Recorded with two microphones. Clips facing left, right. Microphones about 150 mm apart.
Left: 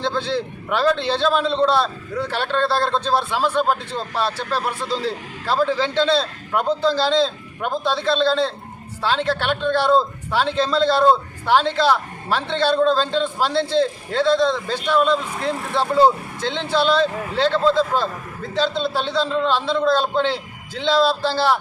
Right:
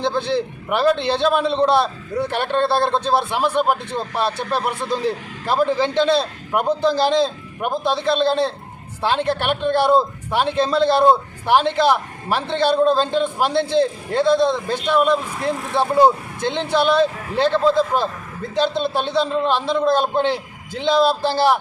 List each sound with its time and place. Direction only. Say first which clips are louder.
0.0 s a man's voice: right 2 dB; 15° right (ahead or behind)